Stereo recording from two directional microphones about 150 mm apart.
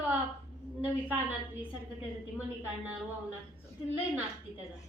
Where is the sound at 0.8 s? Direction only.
15° right (ahead or behind).